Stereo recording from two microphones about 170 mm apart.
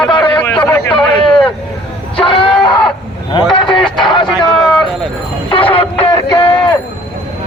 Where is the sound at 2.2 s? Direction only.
30° left (ahead or behind).